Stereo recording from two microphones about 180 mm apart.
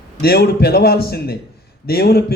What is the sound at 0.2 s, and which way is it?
A man's voice, 60° left (ahead or behind).